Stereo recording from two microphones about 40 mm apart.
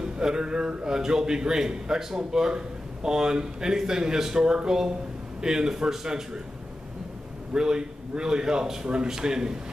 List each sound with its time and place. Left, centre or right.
0.0 s a man's voice: centre
7.5 s a man's voice: centre